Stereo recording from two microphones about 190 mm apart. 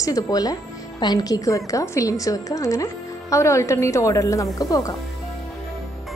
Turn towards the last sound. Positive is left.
turn(degrees=20)  # may be behind; listen again after turning